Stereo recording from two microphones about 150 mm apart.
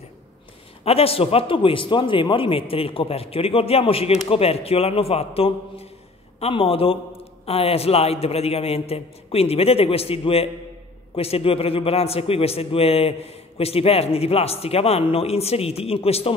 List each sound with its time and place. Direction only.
0.8 s a man's voice: 40° left (ahead or behind)